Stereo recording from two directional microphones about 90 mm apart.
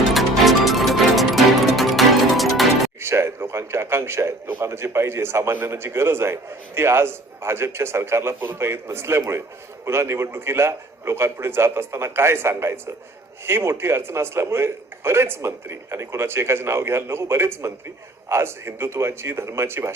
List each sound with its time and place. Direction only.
0.1 s music: centre (ahead or behind)
3.0 s a sound: 30° right (ahead or behind)
4.6 s a man's voice: 30° right (ahead or behind)